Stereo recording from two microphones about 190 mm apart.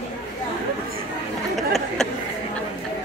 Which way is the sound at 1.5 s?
Centre (ahead or behind).